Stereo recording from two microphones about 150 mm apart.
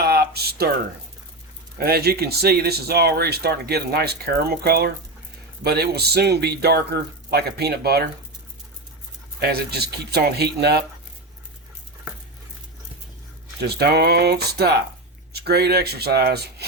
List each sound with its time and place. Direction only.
0.0 s a sound: 90° right
1.8 s speech: 90° right
9.4 s speech: 90° right
13.6 s speech: 90° right